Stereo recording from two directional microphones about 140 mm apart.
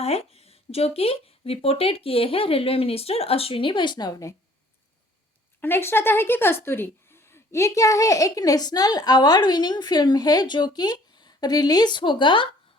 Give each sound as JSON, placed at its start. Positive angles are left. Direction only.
{"t": 0.0, "sound": "speech", "side_deg": 45}
{"t": 5.5, "sound": "a woman's voice", "side_deg": 15}